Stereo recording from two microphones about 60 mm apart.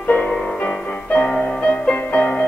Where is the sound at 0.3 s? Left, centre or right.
Centre.